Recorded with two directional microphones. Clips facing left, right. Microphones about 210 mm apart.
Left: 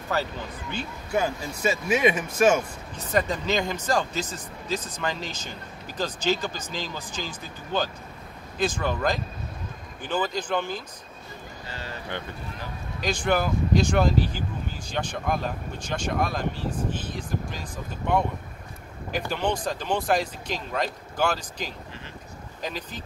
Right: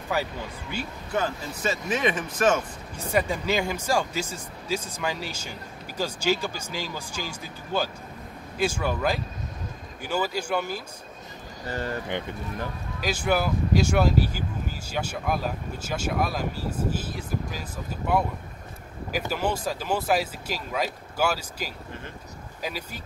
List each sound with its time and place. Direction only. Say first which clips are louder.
0.1 s speech: even; 10° right (ahead or behind)
1.1 s speech: left 2 dB; 10° left (ahead or behind)
3.0 s speech: even; 10° right (ahead or behind)
11.6 s speech: right 9 dB; 50° right (ahead or behind)
13.0 s speech: even; 5° right (ahead or behind)